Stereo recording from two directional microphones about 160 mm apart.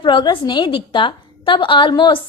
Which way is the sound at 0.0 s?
30° left (ahead or behind).